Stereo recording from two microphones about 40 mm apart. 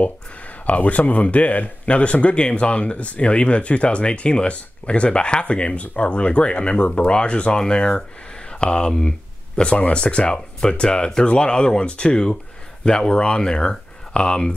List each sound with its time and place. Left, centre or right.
0.7 s speech: left